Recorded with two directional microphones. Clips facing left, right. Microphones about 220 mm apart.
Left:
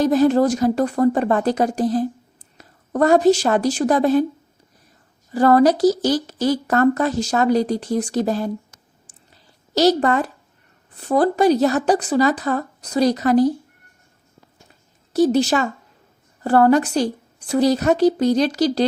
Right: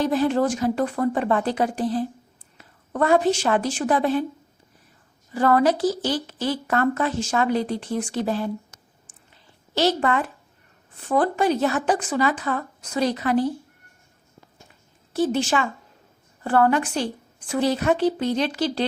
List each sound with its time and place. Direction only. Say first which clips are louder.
0.0 s a woman's voice: left 5 dB; 40° left (ahead or behind)
5.3 s a woman's voice: left 5 dB; 40° left (ahead or behind)
9.3 s a sound: left 5 dB; 40° left (ahead or behind)
10.9 s a woman's voice: left 4 dB; 40° left (ahead or behind)
15.1 s a woman's voice: left 6 dB; 40° left (ahead or behind)